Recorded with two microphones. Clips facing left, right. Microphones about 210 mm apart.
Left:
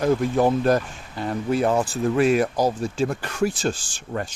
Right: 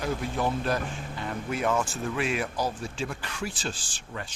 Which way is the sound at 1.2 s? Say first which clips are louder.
Left 8 dB; 35° left (ahead or behind).